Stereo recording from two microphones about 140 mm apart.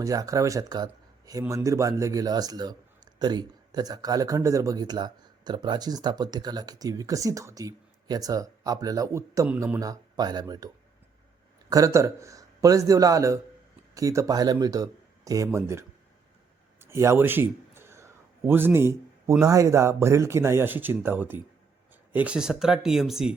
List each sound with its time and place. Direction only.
0.0 s speech: 25° right (ahead or behind)
11.7 s a man's voice: 20° right (ahead or behind); by 23.3 s 5° right (ahead or behind)